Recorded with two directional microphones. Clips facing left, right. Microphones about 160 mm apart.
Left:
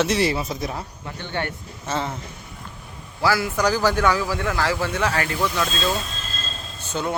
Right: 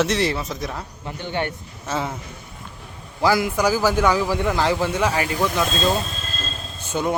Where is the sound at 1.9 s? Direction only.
5° right (ahead or behind).